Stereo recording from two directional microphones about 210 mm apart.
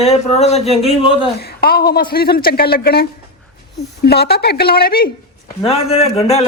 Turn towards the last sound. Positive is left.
turn(degrees=30)  # may be behind; listen again after turning